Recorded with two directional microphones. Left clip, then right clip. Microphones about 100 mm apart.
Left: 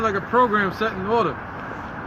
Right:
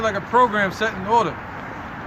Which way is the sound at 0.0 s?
35° right (ahead or behind).